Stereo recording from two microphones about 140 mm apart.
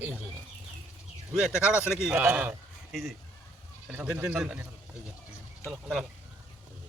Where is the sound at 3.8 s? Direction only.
10° right (ahead or behind).